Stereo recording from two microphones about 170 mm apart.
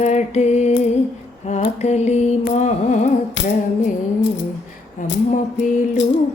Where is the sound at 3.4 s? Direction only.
90° left.